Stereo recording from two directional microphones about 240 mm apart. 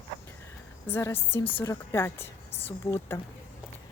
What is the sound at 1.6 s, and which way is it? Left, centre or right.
Speech, centre.